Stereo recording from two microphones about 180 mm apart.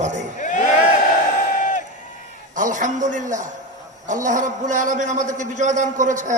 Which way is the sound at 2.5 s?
45° right (ahead or behind).